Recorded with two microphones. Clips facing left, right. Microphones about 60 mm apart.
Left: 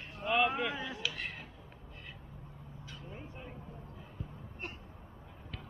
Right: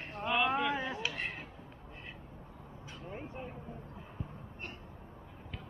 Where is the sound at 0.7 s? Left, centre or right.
Right.